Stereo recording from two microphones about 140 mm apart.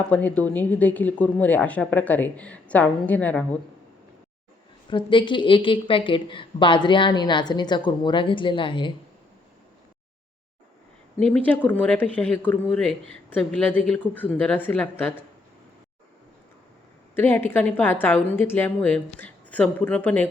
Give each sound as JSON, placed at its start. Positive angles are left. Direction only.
{"t": 0.1, "sound": "speech", "side_deg": 10}
{"t": 4.9, "sound": "a woman's voice", "side_deg": 35}
{"t": 11.2, "sound": "speech", "side_deg": 10}
{"t": 17.2, "sound": "speech", "side_deg": 15}